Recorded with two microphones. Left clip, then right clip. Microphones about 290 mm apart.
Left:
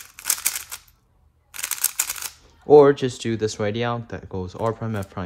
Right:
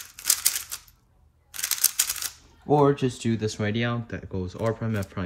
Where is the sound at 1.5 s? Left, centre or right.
Centre.